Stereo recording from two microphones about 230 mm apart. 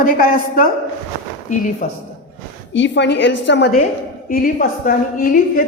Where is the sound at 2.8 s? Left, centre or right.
Left.